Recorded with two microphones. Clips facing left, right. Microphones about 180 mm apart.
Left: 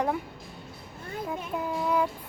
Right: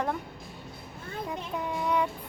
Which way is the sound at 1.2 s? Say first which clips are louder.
Left 2 dB; 5° left (ahead or behind).